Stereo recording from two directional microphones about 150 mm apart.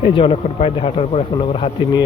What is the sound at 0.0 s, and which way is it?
A man's voice, 40° left (ahead or behind).